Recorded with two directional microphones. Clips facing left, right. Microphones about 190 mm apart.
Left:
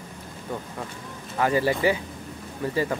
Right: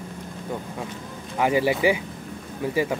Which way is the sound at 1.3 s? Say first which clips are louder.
Right 1 dB; 15° right (ahead or behind).